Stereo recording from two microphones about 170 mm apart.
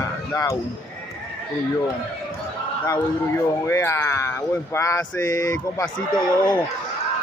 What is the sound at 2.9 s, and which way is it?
Speech, 15° left (ahead or behind).